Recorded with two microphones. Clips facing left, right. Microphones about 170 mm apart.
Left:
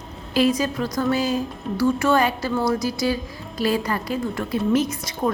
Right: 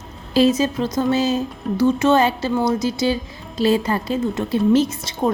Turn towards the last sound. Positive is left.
turn(degrees=-25)  # may be behind; listen again after turning